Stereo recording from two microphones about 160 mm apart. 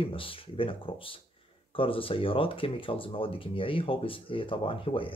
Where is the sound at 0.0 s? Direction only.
35° left (ahead or behind).